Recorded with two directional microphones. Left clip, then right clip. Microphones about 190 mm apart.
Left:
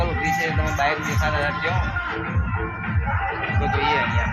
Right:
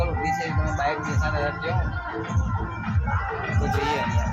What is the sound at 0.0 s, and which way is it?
Music, 35° left (ahead or behind).